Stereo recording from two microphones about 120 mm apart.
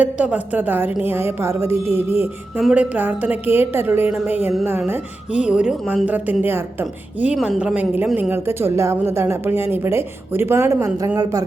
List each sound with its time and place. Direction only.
0.0 s speech: 10° right (ahead or behind)
2.6 s a woman's voice: 5° right (ahead or behind); by 11.4 s 30° right (ahead or behind)